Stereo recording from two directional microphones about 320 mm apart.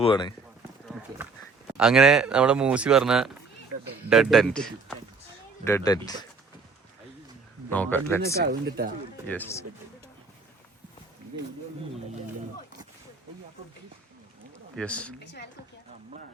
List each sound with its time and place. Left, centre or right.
0.0 s speech: centre
1.8 s speech: centre
7.7 s speech: centre
8.4 s speech: right
9.2 s speech: centre
14.8 s speech: centre
15.2 s a woman's voice: left